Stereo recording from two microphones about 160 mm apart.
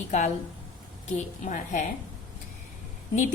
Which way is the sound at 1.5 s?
50° left (ahead or behind).